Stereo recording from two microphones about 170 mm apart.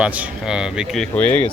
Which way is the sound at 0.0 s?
5° right (ahead or behind).